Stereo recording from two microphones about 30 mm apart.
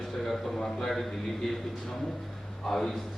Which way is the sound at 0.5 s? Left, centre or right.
Centre.